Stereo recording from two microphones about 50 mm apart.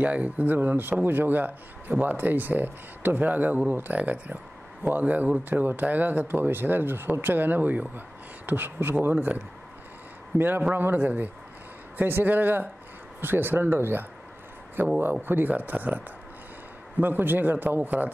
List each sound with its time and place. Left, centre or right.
0.0 s speech: right
9.0 s speech: right
17.0 s speech: right